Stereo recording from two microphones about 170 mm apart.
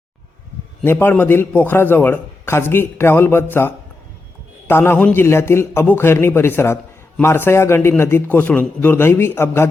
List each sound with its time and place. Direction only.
0.9 s a man's voice: 10° left (ahead or behind)
4.7 s a man's voice: 10° left (ahead or behind)